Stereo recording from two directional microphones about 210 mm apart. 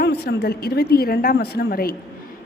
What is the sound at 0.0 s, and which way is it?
A woman's voice, 50° left (ahead or behind).